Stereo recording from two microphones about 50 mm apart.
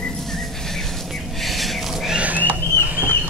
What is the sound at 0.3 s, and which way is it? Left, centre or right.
Bird, centre.